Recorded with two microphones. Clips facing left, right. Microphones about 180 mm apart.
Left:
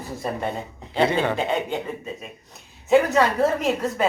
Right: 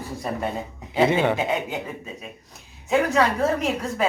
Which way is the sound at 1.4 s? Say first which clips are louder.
Left 1 dB; 5° right (ahead or behind).